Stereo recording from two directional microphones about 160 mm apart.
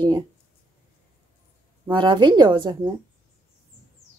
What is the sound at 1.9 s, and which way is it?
Speech, 30° right (ahead or behind).